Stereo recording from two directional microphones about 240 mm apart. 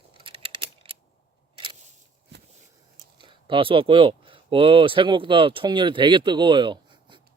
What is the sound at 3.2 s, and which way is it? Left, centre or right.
Speech, right.